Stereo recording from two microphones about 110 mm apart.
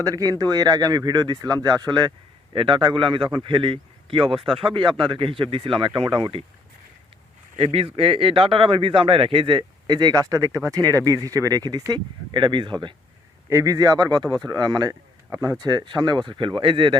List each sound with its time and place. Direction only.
0.0 s a man's voice: 35° right (ahead or behind)
7.6 s a man's voice: 60° right (ahead or behind); by 12.7 s 45° right (ahead or behind)
13.5 s speech: 30° right (ahead or behind)
15.6 s a man's voice: 40° right (ahead or behind)